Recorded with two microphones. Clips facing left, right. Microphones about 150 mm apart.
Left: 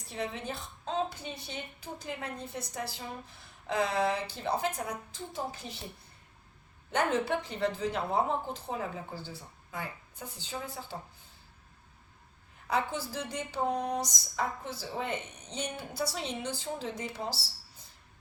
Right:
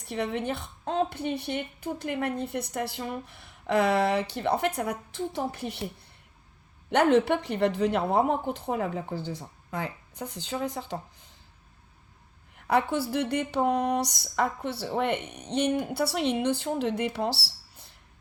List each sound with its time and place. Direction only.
0.0 s a woman's voice: 65° right (ahead or behind)
6.9 s a woman's voice: 65° right (ahead or behind)
9.1 s speech: 20° right (ahead or behind)
9.6 s speech: 75° right (ahead or behind)
12.6 s a woman's voice: 65° right (ahead or behind)